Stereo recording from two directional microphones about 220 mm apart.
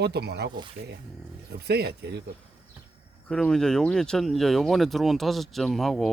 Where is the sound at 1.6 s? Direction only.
45° right (ahead or behind).